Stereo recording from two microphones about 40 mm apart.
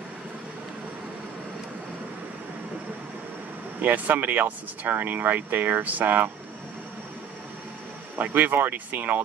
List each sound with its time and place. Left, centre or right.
3.8 s speech: right
8.2 s speech: right